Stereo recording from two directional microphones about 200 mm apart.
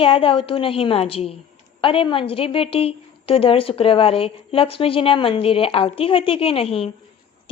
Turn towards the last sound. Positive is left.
turn(degrees=30)  # may be behind; listen again after turning